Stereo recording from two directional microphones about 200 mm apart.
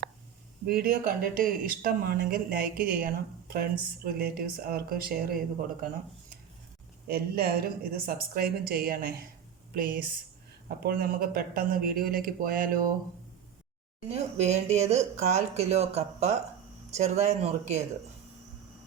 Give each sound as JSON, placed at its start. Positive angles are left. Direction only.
{"t": 0.7, "sound": "speech", "side_deg": -50}
{"t": 7.1, "sound": "speech", "side_deg": -50}
{"t": 14.1, "sound": "speech", "side_deg": -35}